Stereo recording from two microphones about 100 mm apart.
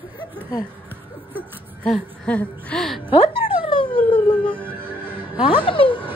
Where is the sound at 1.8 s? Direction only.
10° left (ahead or behind).